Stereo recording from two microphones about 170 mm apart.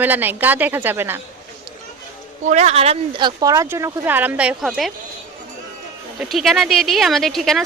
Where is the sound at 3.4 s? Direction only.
20° right (ahead or behind); by 4.9 s centre (ahead or behind).